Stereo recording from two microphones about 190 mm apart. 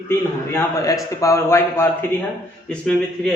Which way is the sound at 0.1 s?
15° left (ahead or behind).